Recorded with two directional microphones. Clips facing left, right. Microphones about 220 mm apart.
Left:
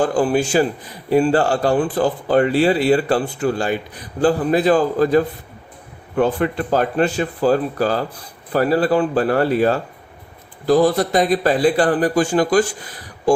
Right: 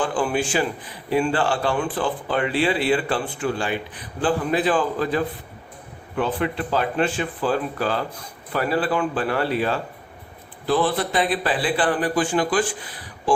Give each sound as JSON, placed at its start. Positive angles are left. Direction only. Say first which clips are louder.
{"t": 0.0, "sound": "a man's voice", "louder": "left 6 dB", "side_deg": 40}